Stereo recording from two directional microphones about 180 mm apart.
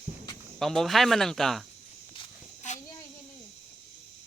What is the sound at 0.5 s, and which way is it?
Speech, centre (ahead or behind).